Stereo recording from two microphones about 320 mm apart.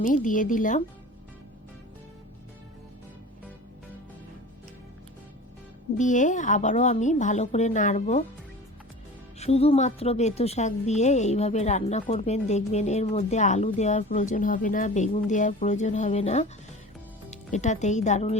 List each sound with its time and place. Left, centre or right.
0.1 s a woman's voice: left
6.0 s a woman's voice: left
9.4 s a woman's voice: centre